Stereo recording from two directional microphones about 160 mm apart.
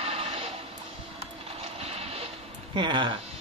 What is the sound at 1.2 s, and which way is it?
Music, 40° right (ahead or behind).